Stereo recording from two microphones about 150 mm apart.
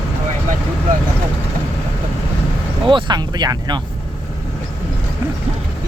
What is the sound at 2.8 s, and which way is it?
Speech, 30° right (ahead or behind).